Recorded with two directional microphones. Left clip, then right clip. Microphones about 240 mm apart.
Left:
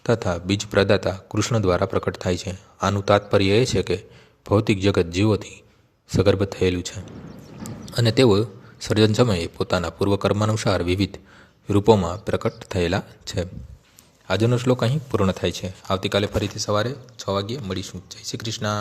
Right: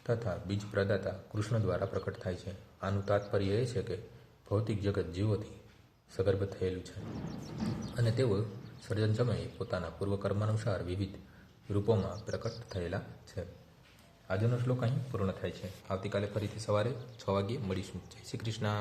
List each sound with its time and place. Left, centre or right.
0.0 s speech: left
7.3 s a sound: centre
7.9 s a man's voice: left